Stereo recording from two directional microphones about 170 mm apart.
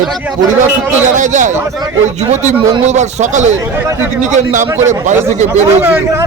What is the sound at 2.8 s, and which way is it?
A man's voice, 45° right (ahead or behind).